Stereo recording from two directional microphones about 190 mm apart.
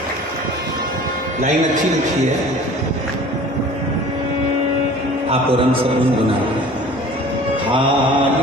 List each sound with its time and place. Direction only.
5.3 s music: 30° right (ahead or behind)